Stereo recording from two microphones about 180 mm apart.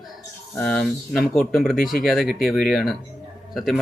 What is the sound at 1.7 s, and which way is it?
Speech, 50° left (ahead or behind).